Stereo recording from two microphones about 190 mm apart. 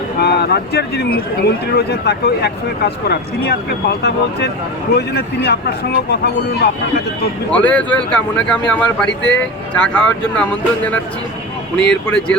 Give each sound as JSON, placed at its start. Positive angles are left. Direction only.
{"t": 0.2, "sound": "speech", "side_deg": 60}
{"t": 7.5, "sound": "speech", "side_deg": 5}
{"t": 9.0, "sound": "speech", "side_deg": 70}
{"t": 9.4, "sound": "speech", "side_deg": 5}
{"t": 11.8, "sound": "speech", "side_deg": 5}